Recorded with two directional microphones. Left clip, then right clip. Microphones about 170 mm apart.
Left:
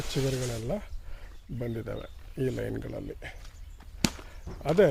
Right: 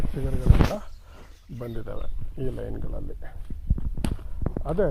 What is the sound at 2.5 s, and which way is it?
Speech, 45° left (ahead or behind).